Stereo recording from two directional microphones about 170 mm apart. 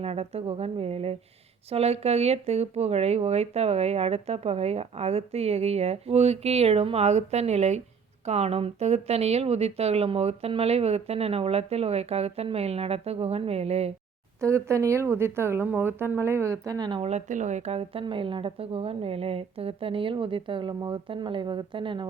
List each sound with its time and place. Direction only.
0.0 s speech: 35° right (ahead or behind)
14.4 s speech: 15° right (ahead or behind)
17.0 s speech: 40° right (ahead or behind)